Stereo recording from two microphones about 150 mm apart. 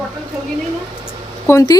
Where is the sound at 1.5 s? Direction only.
20° left (ahead or behind).